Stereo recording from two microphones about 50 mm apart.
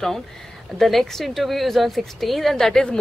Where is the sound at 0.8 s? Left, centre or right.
Centre.